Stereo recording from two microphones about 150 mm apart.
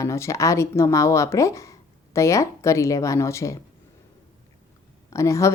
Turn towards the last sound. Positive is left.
turn(degrees=20)  # may be behind; listen again after turning